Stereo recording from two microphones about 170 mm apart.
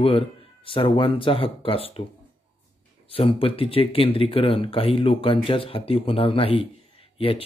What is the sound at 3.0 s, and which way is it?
Speech, 35° left (ahead or behind).